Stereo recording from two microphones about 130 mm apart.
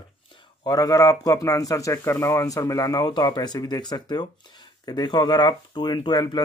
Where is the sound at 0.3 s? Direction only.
30° left (ahead or behind).